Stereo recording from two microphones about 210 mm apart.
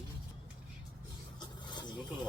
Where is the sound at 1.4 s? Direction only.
20° left (ahead or behind).